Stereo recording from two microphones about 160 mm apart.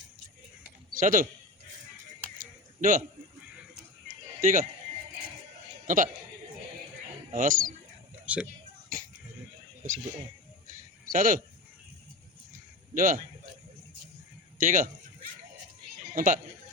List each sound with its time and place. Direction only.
0.9 s a man's voice: 60° right (ahead or behind)
2.4 s a sound: 55° right (ahead or behind)
4.4 s speech: 55° right (ahead or behind)
7.3 s a man's voice: 60° right (ahead or behind)
8.3 s speech: 10° right (ahead or behind)
9.8 s speech: 55° right (ahead or behind)
10.7 s a sound: 60° right (ahead or behind)
12.9 s speech: 55° right (ahead or behind)
14.6 s speech: 55° right (ahead or behind)
16.1 s a man's voice: 55° right (ahead or behind)